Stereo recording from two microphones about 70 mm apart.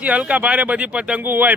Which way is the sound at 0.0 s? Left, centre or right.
Centre.